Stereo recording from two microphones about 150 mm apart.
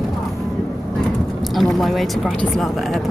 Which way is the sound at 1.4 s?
Centre (ahead or behind).